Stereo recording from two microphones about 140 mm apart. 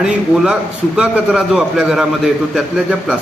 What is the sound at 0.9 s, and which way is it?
A man's voice, 5° right (ahead or behind).